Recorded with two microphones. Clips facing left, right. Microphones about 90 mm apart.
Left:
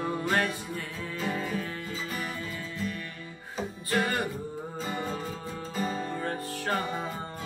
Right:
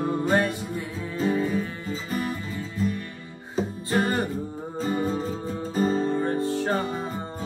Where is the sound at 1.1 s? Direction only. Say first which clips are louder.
Right 8 dB; 30° right (ahead or behind).